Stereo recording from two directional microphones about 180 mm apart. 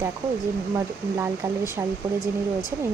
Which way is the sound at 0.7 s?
15° right (ahead or behind).